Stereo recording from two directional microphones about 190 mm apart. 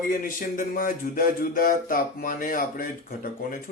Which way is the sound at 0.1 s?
45° left (ahead or behind).